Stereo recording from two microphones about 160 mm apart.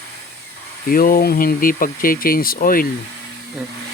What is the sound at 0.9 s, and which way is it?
Speech, 60° left (ahead or behind).